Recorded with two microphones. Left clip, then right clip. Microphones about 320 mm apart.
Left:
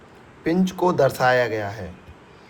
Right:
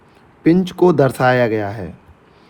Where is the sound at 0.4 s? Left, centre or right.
Centre.